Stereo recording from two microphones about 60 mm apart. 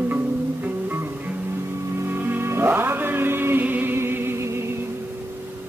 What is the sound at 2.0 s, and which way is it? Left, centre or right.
Music, right.